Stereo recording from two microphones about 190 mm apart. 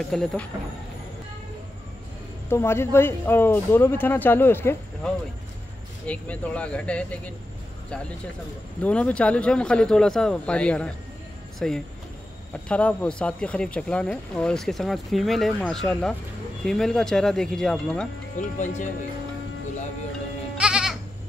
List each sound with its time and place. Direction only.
0.1 s speech: centre (ahead or behind)
2.5 s speech: 15° left (ahead or behind)
8.8 s speech: 5° left (ahead or behind)
18.4 s speech: 40° left (ahead or behind)
20.5 s goat: 5° right (ahead or behind)